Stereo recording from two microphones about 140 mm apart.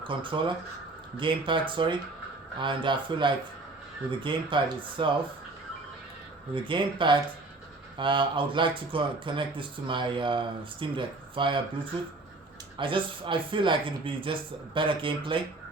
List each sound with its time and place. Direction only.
0.0 s speech: 35° right (ahead or behind)
6.5 s speech: 35° right (ahead or behind)
12.7 s speech: 35° right (ahead or behind)